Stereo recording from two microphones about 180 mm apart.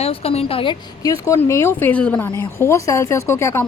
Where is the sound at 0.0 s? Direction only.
35° left (ahead or behind).